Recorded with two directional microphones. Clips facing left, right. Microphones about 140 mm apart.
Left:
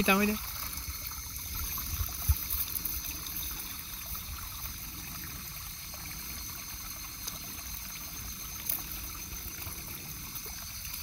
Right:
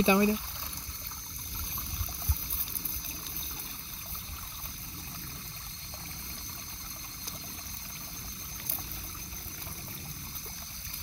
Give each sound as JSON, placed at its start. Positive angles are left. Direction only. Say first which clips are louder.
{"t": 0.0, "sound": "speech", "louder": "right 3 dB", "side_deg": -25}